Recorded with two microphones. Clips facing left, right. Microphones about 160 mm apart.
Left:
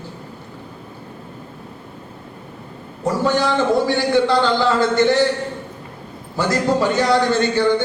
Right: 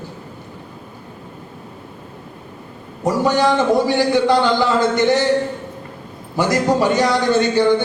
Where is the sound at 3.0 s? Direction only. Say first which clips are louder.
Right 2 dB; 15° right (ahead or behind).